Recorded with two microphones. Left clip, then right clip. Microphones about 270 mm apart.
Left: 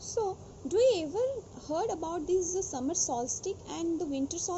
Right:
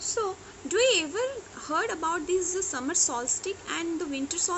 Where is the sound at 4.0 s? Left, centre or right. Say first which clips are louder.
Right 1 dB; right.